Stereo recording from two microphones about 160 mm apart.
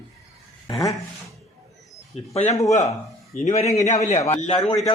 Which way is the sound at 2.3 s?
45° left (ahead or behind).